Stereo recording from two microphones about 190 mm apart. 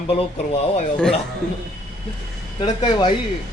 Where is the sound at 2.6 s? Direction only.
25° left (ahead or behind).